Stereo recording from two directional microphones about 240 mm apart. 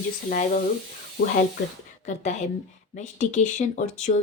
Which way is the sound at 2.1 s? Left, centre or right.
Left.